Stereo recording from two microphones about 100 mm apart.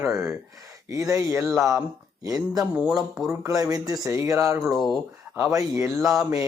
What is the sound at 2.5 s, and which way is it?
Speech, 5° right (ahead or behind).